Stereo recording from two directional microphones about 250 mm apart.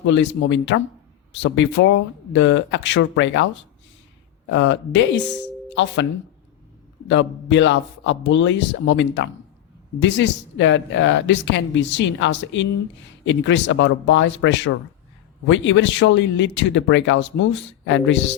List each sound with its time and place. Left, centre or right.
0.0 s speech: left
4.5 s speech: left
7.1 s speech: left